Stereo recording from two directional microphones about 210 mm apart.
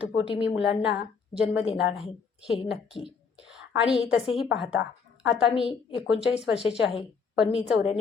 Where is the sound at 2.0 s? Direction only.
30° left (ahead or behind).